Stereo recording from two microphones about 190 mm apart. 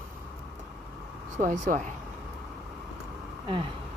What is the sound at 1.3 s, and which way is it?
Speech, 40° right (ahead or behind).